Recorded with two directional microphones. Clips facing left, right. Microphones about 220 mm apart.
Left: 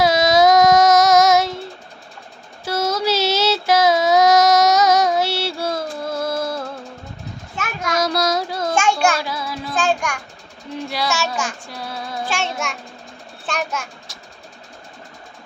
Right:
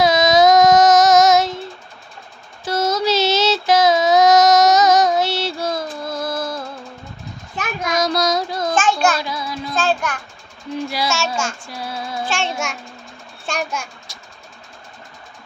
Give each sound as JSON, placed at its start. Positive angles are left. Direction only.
{"t": 0.0, "sound": "child singing", "side_deg": 10}
{"t": 2.6, "sound": "child singing", "side_deg": 10}
{"t": 7.9, "sound": "child singing", "side_deg": 10}
{"t": 10.8, "sound": "a child's voice", "side_deg": 0}
{"t": 11.6, "sound": "child singing", "side_deg": 0}
{"t": 13.5, "sound": "a child's voice", "side_deg": 0}